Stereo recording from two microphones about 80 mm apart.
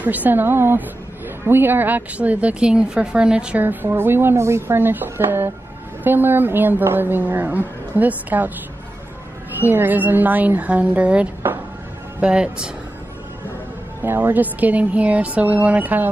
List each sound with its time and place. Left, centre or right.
0.0 s a woman's voice: right
3.6 s a woman's voice: right
9.6 s a woman's voice: right
14.0 s a woman's voice: right